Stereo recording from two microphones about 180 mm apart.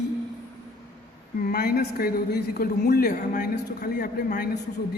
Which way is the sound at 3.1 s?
40° left (ahead or behind).